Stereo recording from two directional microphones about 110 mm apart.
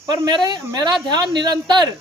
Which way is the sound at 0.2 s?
40° right (ahead or behind).